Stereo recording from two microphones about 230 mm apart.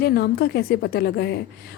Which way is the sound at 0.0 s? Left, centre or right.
Left.